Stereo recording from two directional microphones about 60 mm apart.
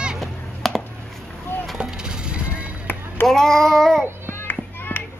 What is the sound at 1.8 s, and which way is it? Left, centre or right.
Music, centre.